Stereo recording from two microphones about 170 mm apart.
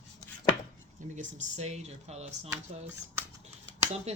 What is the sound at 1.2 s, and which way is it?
Speech, 45° right (ahead or behind).